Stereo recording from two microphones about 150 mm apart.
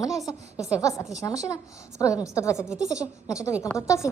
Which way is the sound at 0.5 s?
5° right (ahead or behind).